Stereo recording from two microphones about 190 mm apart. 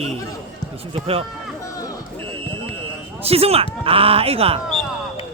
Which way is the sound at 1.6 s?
20° left (ahead or behind).